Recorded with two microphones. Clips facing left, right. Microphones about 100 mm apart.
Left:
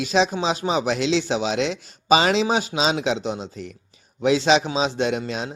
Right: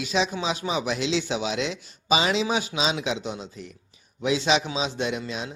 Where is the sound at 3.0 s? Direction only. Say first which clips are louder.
Left 5 dB; 70° left (ahead or behind).